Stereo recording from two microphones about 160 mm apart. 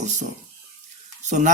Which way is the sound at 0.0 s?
45° right (ahead or behind).